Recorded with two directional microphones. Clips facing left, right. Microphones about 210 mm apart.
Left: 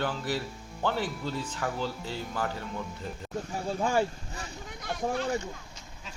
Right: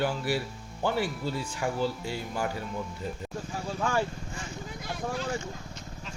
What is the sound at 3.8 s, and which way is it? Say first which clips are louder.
Speech: left 2 dB; 15° left (ahead or behind).